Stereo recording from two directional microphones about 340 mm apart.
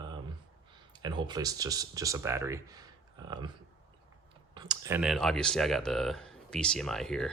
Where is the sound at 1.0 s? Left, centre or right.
Centre.